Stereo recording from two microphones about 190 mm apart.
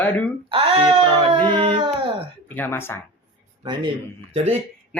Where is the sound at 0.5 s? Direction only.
30° right (ahead or behind).